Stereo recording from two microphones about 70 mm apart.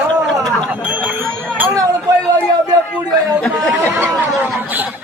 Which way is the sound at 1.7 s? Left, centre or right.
Right.